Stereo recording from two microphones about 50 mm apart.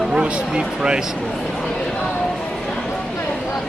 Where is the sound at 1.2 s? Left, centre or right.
Centre.